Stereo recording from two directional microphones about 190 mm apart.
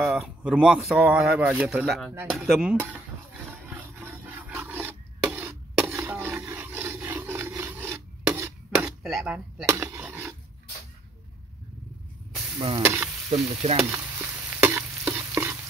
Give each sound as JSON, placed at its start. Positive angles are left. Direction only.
{"t": 0.0, "sound": "speech", "side_deg": -5}
{"t": 3.6, "sound": "filing", "side_deg": -10}
{"t": 9.0, "sound": "speech", "side_deg": 0}
{"t": 9.7, "sound": "speech", "side_deg": -15}
{"t": 12.5, "sound": "stir", "side_deg": -25}
{"t": 12.8, "sound": "stir", "side_deg": -15}
{"t": 13.3, "sound": "stir", "side_deg": -30}
{"t": 13.8, "sound": "stir", "side_deg": -15}